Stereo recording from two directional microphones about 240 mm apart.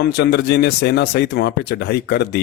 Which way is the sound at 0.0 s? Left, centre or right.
Left.